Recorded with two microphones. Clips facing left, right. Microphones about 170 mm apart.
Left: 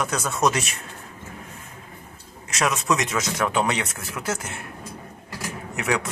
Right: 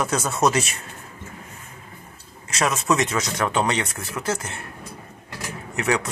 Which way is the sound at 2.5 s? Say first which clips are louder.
Right 1 dB; centre (ahead or behind).